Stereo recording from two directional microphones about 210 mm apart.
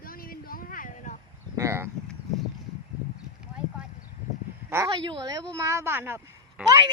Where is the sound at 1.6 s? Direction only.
10° right (ahead or behind).